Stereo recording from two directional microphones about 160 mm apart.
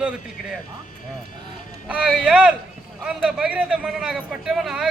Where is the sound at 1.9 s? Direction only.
5° right (ahead or behind).